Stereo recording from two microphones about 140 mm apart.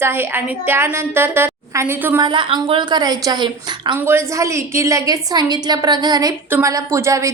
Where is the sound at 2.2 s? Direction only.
35° right (ahead or behind).